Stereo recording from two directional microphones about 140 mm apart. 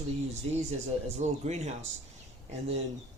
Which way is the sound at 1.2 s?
55° right (ahead or behind).